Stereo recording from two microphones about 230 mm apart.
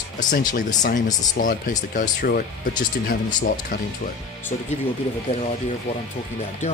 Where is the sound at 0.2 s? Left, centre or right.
Left.